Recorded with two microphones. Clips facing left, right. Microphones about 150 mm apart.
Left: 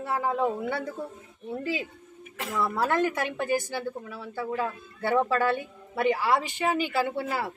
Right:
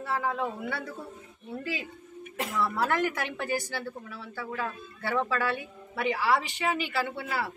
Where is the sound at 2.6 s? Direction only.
25° left (ahead or behind).